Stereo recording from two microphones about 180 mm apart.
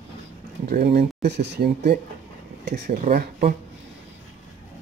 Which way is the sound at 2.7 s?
50° right (ahead or behind).